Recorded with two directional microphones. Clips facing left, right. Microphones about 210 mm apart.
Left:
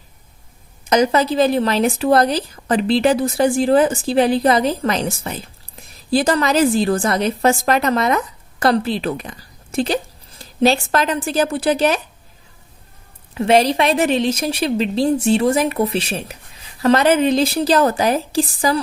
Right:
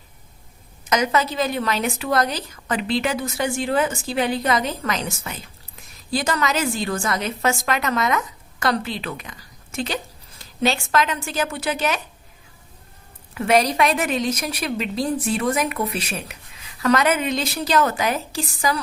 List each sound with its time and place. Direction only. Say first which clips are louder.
0.9 s a woman's voice: left 6 dB; 35° left (ahead or behind)
13.3 s a woman's voice: left 4 dB; 25° left (ahead or behind)